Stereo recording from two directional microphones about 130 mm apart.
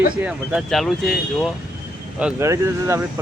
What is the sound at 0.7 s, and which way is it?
Speech, centre (ahead or behind).